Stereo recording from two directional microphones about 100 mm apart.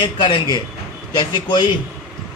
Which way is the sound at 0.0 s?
50° left (ahead or behind).